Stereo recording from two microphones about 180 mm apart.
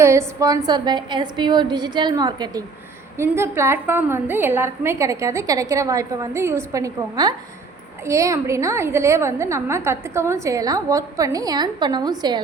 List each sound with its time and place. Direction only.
0.0 s a woman's voice: 15° right (ahead or behind)